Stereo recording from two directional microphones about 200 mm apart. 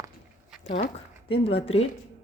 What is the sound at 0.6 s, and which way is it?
Speech, 35° left (ahead or behind).